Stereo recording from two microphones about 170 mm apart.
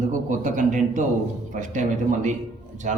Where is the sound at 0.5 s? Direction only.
50° right (ahead or behind).